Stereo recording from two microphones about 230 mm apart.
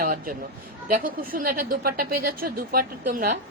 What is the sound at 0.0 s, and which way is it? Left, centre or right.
A man's voice, right.